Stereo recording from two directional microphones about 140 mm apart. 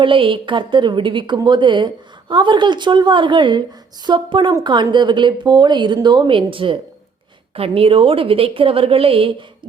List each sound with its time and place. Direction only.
0.0 s speech: 35° right (ahead or behind)